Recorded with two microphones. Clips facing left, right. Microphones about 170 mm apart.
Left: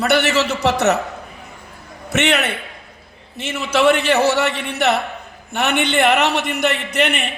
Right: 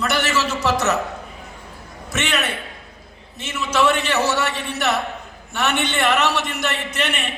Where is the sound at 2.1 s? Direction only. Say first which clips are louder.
Left 5 dB; 60° left (ahead or behind).